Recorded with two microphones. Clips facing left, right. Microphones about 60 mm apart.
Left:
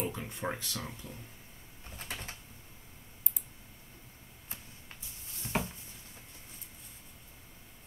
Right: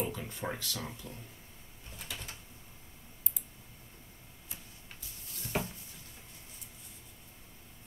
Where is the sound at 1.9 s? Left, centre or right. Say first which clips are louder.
Left 2 dB; left.